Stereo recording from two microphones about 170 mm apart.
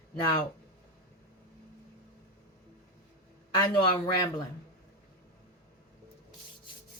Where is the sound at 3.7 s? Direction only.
25° left (ahead or behind).